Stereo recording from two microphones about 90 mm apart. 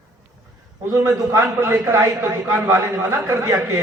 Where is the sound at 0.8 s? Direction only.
35° right (ahead or behind).